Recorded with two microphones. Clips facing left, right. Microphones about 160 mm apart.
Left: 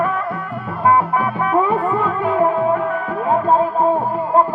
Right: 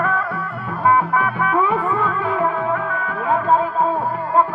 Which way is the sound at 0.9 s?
35° left (ahead or behind).